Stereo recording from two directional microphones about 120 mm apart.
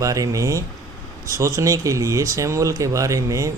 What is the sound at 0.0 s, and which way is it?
Speech, 30° right (ahead or behind).